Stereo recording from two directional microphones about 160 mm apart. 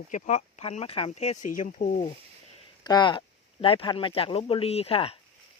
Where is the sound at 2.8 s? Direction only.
25° left (ahead or behind).